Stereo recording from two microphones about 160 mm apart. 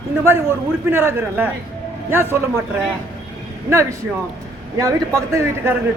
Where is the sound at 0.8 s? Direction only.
15° right (ahead or behind).